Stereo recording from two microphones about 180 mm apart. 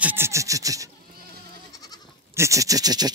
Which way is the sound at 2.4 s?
15° right (ahead or behind).